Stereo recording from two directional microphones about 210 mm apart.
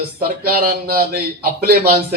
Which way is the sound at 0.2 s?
45° right (ahead or behind).